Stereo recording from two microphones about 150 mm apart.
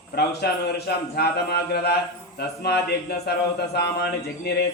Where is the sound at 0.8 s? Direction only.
90° left.